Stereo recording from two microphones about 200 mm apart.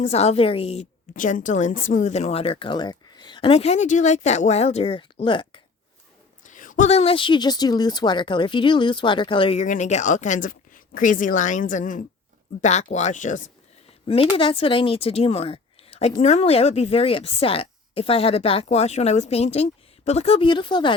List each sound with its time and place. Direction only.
0.0 s a woman's voice: 30° left (ahead or behind)
1.1 s a woman's voice: 40° left (ahead or behind); by 5.5 s 25° left (ahead or behind)
6.4 s a woman's voice: 40° left (ahead or behind)
14.3 s a woman's voice: 25° left (ahead or behind)